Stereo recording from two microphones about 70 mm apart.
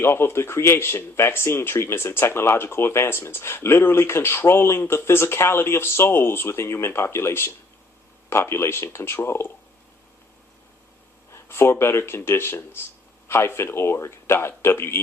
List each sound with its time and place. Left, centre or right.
0.0 s speech: left
11.3 s speech: left